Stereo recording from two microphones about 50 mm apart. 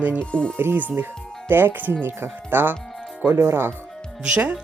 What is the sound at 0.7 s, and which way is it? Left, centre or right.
Speech, right.